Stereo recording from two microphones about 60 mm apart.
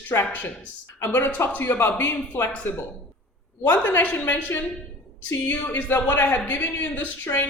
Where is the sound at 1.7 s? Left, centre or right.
Left.